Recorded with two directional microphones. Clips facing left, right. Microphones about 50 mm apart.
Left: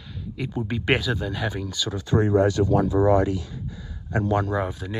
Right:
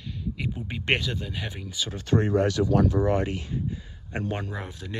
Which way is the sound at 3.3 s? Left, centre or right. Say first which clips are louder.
Left 2 dB; right.